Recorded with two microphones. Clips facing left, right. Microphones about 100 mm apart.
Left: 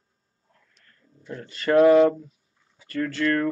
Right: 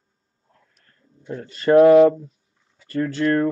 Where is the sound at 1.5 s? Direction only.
30° right (ahead or behind).